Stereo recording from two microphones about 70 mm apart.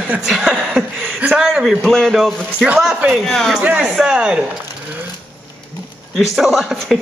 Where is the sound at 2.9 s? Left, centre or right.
Centre.